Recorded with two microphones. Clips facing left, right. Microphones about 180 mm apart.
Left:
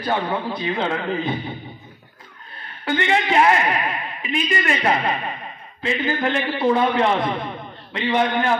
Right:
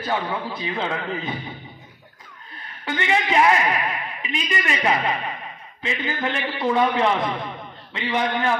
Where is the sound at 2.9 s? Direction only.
30° left (ahead or behind).